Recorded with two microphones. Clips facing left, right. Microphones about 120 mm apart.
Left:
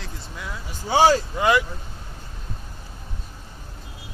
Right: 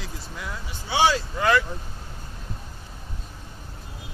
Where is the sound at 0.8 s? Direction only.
40° left (ahead or behind).